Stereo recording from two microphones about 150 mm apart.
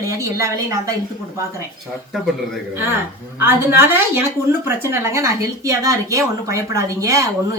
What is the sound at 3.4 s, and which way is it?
A woman's voice, 15° right (ahead or behind).